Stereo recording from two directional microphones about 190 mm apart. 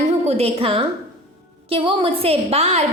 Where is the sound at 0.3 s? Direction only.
30° right (ahead or behind).